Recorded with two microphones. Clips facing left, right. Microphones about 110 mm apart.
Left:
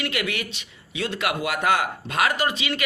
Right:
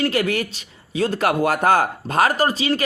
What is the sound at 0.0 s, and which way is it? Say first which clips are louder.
Speech: right 7 dB; 35° right (ahead or behind).